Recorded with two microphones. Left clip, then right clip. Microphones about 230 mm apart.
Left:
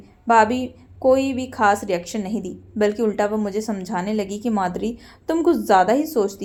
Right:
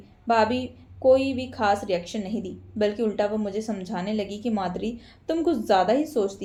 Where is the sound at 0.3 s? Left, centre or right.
Left.